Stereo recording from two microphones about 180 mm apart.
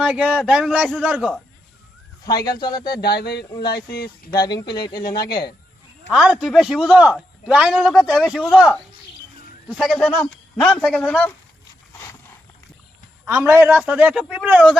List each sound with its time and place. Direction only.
0.0 s a man's voice: 5° right (ahead or behind)
2.2 s speech: 25° left (ahead or behind)
3.0 s speech: 65° left (ahead or behind)
4.3 s speech: 20° left (ahead or behind)
6.4 s a man's voice: centre (ahead or behind)
13.2 s a man's voice: 15° right (ahead or behind)